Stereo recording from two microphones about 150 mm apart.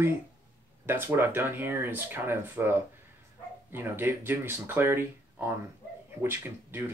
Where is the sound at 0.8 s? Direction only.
15° right (ahead or behind).